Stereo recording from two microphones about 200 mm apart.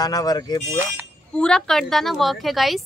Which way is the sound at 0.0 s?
20° left (ahead or behind).